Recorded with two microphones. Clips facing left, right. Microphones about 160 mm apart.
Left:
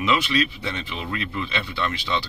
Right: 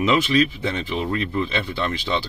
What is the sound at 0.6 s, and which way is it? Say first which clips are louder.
Speech: right 6 dB; 45° right (ahead or behind).